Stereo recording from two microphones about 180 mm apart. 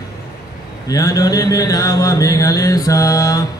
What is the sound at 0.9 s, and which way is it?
Mantra, 20° left (ahead or behind).